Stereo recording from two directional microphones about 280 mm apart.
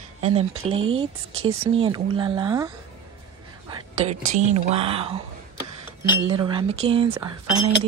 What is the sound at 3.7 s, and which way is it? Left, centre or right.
Speech, right.